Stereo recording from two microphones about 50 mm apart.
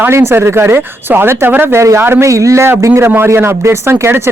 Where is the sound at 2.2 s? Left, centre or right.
Right.